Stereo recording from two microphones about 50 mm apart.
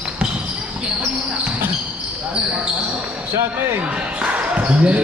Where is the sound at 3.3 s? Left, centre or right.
Right.